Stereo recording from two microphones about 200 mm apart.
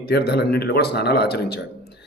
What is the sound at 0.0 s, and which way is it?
A man's voice, 50° left (ahead or behind).